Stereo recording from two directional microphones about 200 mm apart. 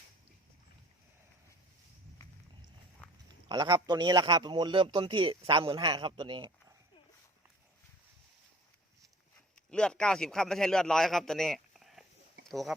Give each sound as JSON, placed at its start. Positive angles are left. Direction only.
{"t": 3.2, "sound": "a man's voice", "side_deg": -20}
{"t": 9.6, "sound": "a man's voice", "side_deg": 5}